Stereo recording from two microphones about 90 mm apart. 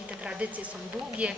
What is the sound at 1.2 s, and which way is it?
Speech, 15° right (ahead or behind).